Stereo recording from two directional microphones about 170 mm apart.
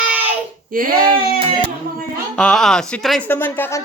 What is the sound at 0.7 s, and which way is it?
Speech, 60° right (ahead or behind).